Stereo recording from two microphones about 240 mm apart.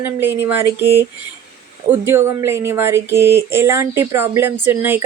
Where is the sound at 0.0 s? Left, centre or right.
Centre.